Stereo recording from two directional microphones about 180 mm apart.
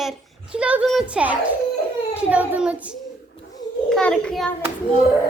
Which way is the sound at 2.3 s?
10° right (ahead or behind).